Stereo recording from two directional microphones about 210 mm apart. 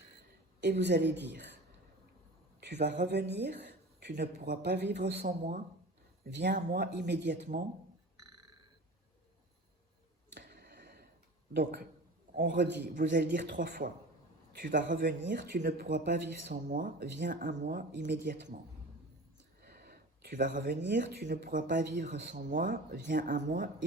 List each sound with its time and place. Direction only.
0.6 s speech: 55° right (ahead or behind)
3.0 s speech: 50° right (ahead or behind)
10.3 s a sound: 45° right (ahead or behind)
12.4 s a man's voice: 50° right (ahead or behind)
14.9 s speech: 50° right (ahead or behind)
19.6 s speech: 45° right (ahead or behind)